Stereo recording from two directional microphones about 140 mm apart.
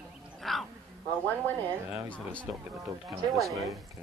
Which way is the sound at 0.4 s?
Centre (ahead or behind).